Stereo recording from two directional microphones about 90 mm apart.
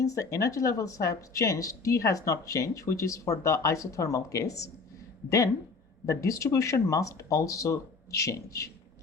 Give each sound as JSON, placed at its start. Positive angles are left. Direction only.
{"t": 0.0, "sound": "speech", "side_deg": 40}
{"t": 6.1, "sound": "speech", "side_deg": 35}